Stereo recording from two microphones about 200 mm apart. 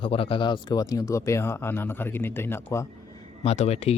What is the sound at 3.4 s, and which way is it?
Speech, 30° left (ahead or behind).